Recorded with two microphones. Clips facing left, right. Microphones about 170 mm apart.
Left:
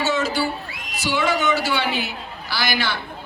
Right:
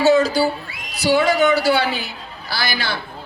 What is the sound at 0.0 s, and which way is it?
Music, 35° right (ahead or behind).